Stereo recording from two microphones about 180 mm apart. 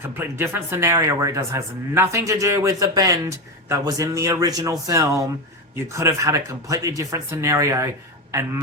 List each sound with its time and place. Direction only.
0.0 s speech: 10° right (ahead or behind)